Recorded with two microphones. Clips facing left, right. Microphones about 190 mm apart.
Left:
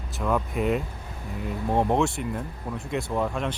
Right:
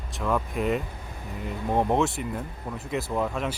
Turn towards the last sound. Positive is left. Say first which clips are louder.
# left 1 dB
turn(degrees=0)  # may be behind; listen again after turning